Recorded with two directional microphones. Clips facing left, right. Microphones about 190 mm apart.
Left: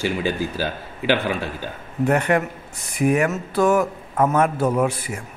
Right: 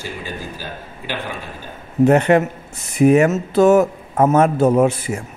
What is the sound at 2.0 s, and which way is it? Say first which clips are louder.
Speech: right 6 dB; 25° right (ahead or behind).